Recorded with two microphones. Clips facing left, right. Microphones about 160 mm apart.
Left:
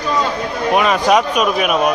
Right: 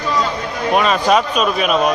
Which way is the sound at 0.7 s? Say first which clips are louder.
Left 1 dB; 15° left (ahead or behind).